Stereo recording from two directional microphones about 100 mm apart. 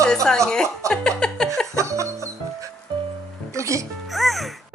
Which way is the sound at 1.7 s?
30° right (ahead or behind).